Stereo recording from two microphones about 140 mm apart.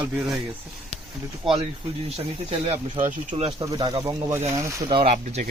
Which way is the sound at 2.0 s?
45° right (ahead or behind).